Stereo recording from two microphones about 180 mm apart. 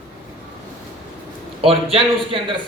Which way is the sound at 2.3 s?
30° right (ahead or behind).